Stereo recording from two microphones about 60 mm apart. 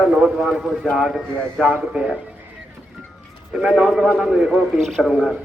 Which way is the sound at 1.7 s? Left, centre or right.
Centre.